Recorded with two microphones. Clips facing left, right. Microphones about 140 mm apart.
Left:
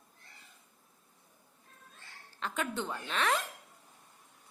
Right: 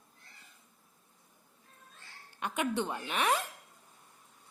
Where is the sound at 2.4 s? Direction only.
15° right (ahead or behind).